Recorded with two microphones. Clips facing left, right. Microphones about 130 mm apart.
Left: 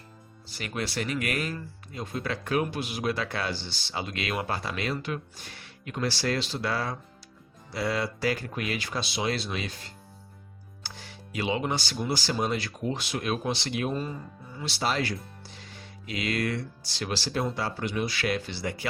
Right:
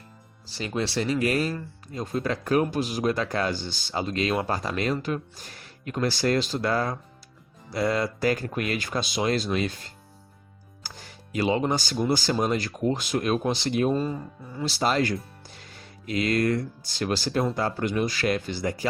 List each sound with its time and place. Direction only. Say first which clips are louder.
0.5 s speech: right 5 dB; 30° right (ahead or behind); by 9.6 s 45° right (ahead or behind)
10.8 s speech: even; 45° right (ahead or behind)